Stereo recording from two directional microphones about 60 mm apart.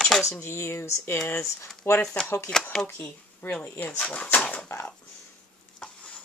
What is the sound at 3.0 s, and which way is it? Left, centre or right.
Speech, left.